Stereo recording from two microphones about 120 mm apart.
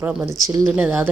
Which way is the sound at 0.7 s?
10° right (ahead or behind).